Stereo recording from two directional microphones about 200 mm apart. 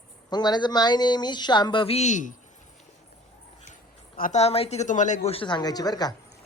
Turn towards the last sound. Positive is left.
turn(degrees=20)  # may be behind; listen again after turning